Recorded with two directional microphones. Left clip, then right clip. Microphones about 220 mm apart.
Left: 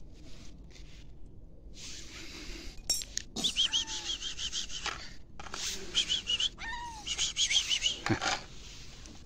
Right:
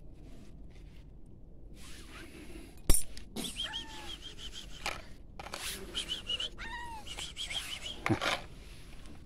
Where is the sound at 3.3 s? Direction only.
5° right (ahead or behind).